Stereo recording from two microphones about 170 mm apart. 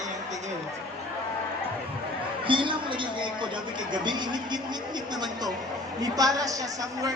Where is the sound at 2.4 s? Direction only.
30° right (ahead or behind).